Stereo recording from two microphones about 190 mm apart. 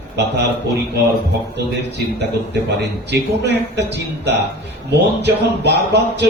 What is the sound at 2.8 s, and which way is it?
Speech, 65° right (ahead or behind).